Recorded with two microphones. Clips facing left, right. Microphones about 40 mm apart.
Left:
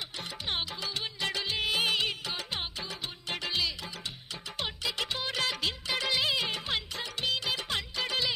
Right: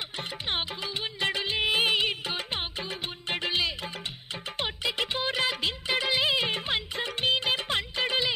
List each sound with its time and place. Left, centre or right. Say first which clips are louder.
0.2 s music: right 3 dB; right